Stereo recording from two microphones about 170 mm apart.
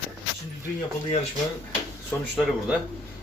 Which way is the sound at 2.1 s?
10° left (ahead or behind).